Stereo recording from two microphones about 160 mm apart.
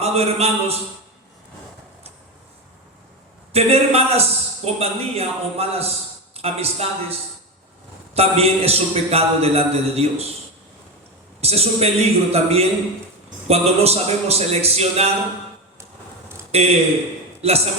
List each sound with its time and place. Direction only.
0.0 s a man's voice: 40° right (ahead or behind)
3.5 s a man's voice: 40° right (ahead or behind)
11.3 s a man's voice: 40° right (ahead or behind)
16.5 s speech: 40° right (ahead or behind)